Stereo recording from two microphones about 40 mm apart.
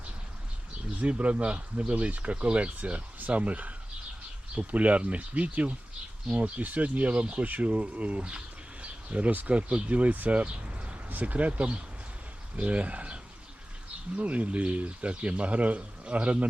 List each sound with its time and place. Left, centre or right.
1.0 s speech: right
11.1 s speech: right
14.2 s speech: right